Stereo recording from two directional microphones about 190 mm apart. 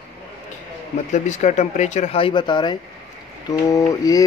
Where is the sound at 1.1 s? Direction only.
40° left (ahead or behind).